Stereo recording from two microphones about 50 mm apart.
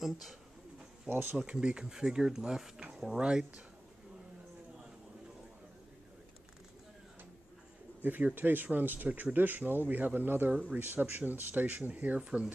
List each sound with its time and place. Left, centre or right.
0.0 s speech: centre
1.1 s speech: right
1.4 s speech: centre
8.0 s speech: right
12.2 s speech: centre